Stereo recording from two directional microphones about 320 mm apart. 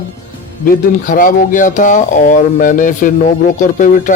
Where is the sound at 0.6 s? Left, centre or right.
Left.